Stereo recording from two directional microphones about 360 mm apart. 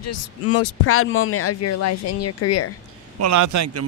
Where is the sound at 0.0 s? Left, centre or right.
Left.